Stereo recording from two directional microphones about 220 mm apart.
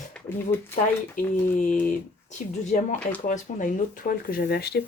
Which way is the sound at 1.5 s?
35° left (ahead or behind).